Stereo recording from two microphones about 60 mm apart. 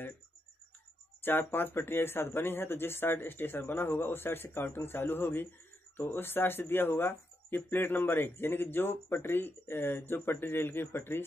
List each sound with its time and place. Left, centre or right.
1.5 s speech: left